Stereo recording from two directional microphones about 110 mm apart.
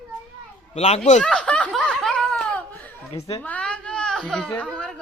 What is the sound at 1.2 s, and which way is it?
Snicker, 10° left (ahead or behind).